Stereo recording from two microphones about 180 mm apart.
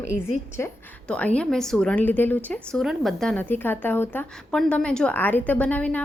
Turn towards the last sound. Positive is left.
turn(degrees=10)  # may be behind; listen again after turning